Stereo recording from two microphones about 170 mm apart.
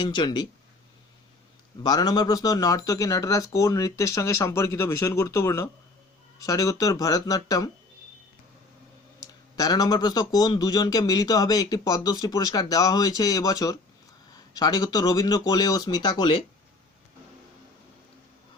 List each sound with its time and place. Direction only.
0.0 s speech: 25° left (ahead or behind)
1.8 s speech: 25° left (ahead or behind)
9.2 s speech: 25° left (ahead or behind)